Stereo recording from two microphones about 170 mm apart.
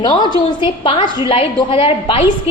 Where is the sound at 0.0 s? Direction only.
25° left (ahead or behind).